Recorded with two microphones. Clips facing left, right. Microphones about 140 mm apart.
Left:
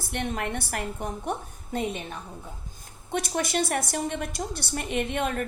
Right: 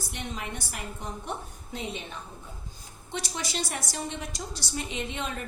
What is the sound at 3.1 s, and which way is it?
A woman's voice, 55° left (ahead or behind).